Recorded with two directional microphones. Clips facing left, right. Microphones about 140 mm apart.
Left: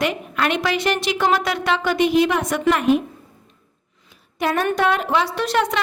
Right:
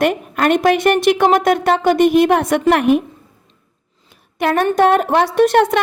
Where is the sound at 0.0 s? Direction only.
50° right (ahead or behind); by 3.0 s 65° right (ahead or behind).